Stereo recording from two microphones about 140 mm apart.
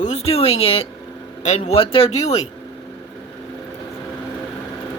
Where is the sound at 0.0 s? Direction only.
50° left (ahead or behind).